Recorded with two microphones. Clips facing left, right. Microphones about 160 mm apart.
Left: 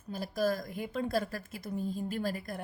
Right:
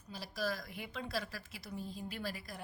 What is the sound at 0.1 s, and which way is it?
A woman's voice, 50° left (ahead or behind).